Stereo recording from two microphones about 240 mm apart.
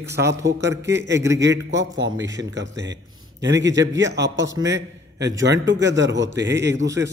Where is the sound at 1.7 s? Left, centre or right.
Right.